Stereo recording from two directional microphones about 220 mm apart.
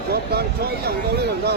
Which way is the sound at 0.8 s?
45° right (ahead or behind).